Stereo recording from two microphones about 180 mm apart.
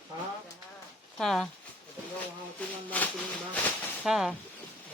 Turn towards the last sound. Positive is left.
turn(degrees=-5)  # may be behind; listen again after turning